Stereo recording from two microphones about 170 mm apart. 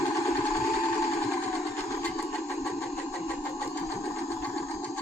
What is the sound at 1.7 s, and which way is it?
Vehicle, 15° left (ahead or behind).